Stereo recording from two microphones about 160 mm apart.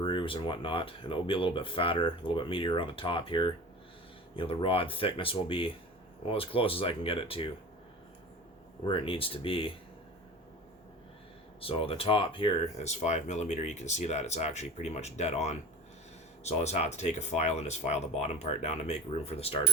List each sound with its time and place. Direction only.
0.0 s speech: 30° left (ahead or behind)
8.8 s speech: 35° left (ahead or behind)
11.6 s speech: 35° left (ahead or behind)